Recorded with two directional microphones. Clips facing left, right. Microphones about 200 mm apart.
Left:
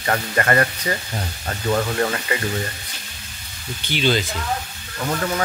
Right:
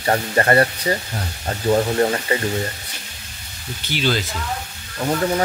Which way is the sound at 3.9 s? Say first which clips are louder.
Left 1 dB; 5° right (ahead or behind).